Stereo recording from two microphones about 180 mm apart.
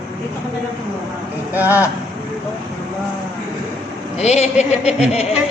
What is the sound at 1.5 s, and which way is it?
Speech, 10° right (ahead or behind).